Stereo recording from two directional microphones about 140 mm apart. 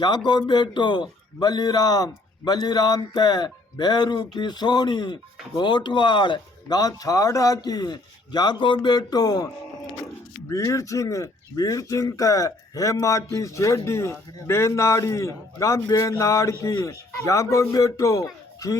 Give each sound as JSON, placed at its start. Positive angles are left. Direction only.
{"t": 0.3, "sound": "a man's voice", "side_deg": 30}
{"t": 10.5, "sound": "a man's voice", "side_deg": 20}